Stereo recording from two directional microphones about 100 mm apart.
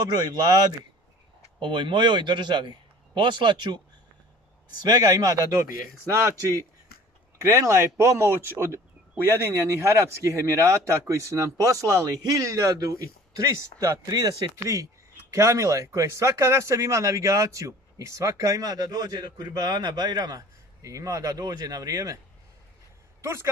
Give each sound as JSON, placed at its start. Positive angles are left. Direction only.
{"t": 1.6, "sound": "a man's voice", "side_deg": -55}
{"t": 4.8, "sound": "speech", "side_deg": -40}
{"t": 23.2, "sound": "speech", "side_deg": -25}